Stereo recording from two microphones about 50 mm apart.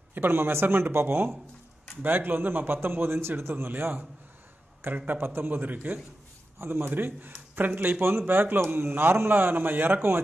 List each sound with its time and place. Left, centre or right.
0.1 s speech: right
2.0 s speech: right
6.6 s a man's voice: right
6.9 s speech: right
8.0 s speech: right